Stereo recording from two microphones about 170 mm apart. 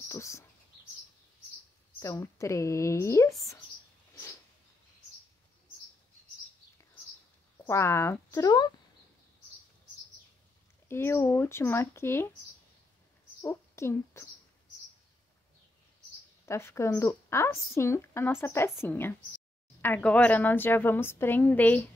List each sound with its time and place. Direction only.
0.1 s bird: 15° left (ahead or behind)
2.0 s speech: 20° left (ahead or behind)
4.1 s a sound: 15° left (ahead or behind)
7.5 s speech: 15° left (ahead or behind)
10.9 s speech: 15° left (ahead or behind)
13.4 s a woman's voice: 15° left (ahead or behind)
16.4 s speech: 15° left (ahead or behind)